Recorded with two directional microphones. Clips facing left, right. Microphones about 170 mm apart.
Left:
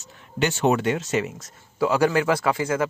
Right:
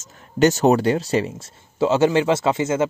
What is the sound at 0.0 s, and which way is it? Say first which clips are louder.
Speech: right 8 dB; 40° right (ahead or behind).